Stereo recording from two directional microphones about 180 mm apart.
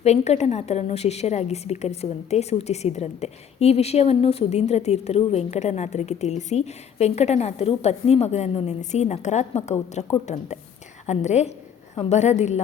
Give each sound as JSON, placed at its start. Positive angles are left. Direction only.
{"t": 0.0, "sound": "a woman's voice", "side_deg": 35}